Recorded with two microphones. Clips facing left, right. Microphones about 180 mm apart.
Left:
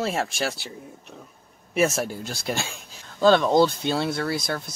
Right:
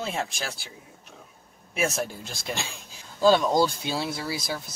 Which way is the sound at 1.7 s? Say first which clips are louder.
Left 5 dB; centre (ahead or behind).